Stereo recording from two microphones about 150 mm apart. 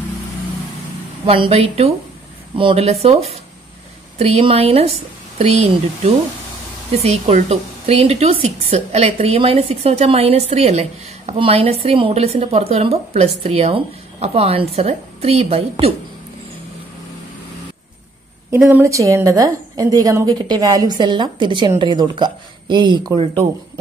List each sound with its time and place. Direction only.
1.2 s a woman's voice: 40° right (ahead or behind)
18.7 s a woman's voice: 15° right (ahead or behind)